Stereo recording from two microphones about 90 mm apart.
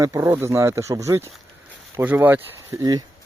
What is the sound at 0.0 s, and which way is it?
Speech, 30° right (ahead or behind).